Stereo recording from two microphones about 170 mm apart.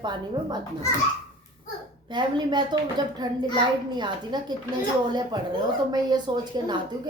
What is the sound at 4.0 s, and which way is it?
Speech, 25° right (ahead or behind).